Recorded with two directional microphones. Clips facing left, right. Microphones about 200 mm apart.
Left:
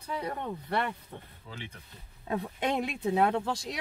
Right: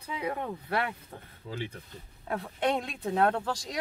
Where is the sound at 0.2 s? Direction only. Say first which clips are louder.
Right 2 dB; 10° right (ahead or behind).